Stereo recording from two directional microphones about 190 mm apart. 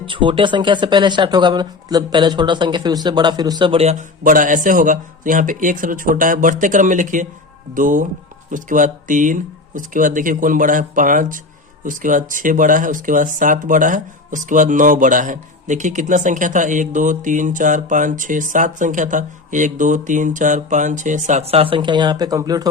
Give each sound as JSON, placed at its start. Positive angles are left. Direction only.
{"t": 0.0, "sound": "speech", "side_deg": -25}